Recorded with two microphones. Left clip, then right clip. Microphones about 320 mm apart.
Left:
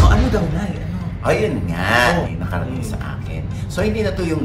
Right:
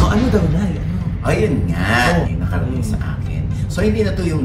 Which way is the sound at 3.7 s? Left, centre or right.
Centre.